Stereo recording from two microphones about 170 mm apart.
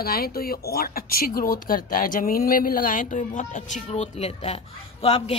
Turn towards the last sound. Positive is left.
turn(degrees=35)  # may be behind; listen again after turning